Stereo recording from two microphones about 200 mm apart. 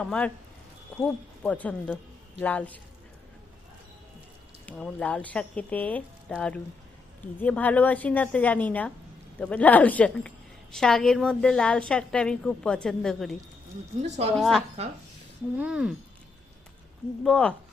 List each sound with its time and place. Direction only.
0.0 s a woman's voice: 5° left (ahead or behind)
4.6 s a woman's voice: 5° left (ahead or behind)
7.3 s a woman's voice: 10° left (ahead or behind)
14.0 s speech: 35° right (ahead or behind)
14.3 s a woman's voice: centre (ahead or behind)
17.2 s a woman's voice: 5° left (ahead or behind)